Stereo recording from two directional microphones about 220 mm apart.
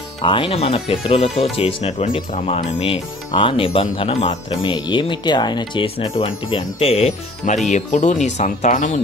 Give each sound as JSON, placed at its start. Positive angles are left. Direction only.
{"t": 0.2, "sound": "speech", "side_deg": 20}